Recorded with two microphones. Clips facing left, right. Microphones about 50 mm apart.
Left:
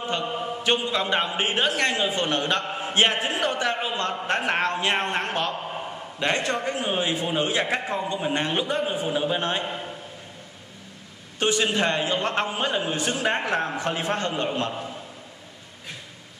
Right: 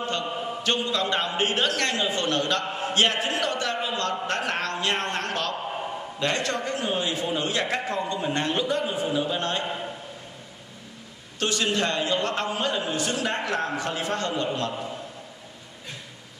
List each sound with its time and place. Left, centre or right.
0.7 s a man's voice: centre
11.3 s a man's voice: left